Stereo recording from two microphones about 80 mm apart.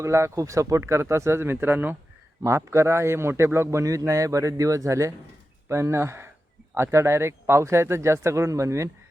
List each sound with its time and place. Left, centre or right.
0.0 s a man's voice: right
2.4 s a man's voice: right